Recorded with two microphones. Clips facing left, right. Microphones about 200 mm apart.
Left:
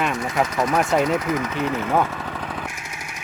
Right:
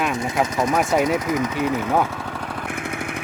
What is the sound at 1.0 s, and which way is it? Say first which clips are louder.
Speech: right 1 dB; 15° right (ahead or behind).